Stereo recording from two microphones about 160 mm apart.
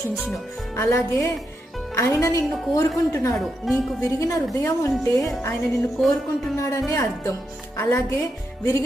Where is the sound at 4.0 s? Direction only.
20° left (ahead or behind).